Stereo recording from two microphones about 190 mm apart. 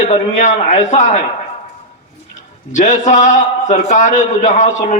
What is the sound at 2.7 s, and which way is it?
A man's voice, 40° left (ahead or behind).